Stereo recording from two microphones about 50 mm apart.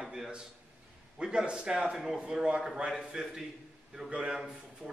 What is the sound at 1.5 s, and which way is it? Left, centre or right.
A man's voice, centre.